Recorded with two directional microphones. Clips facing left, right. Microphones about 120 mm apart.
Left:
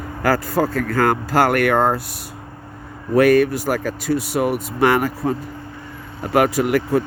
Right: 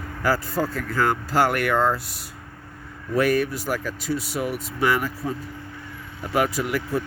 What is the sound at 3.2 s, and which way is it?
Speech, 65° left (ahead or behind).